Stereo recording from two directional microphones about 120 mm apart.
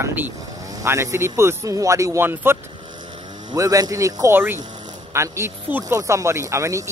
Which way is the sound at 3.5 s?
30° right (ahead or behind).